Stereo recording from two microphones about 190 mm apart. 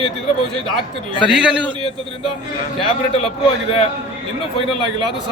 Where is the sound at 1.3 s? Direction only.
5° right (ahead or behind).